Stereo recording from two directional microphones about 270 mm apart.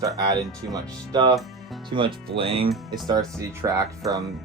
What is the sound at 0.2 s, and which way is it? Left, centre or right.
Speech, centre.